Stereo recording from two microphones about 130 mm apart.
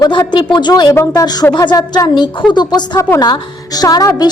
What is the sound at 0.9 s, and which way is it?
Speech, 25° left (ahead or behind).